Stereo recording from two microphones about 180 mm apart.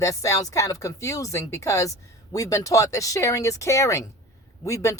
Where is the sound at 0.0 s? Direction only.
20° left (ahead or behind).